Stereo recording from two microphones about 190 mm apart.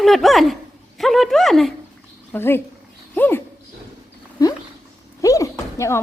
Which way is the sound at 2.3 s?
10° left (ahead or behind).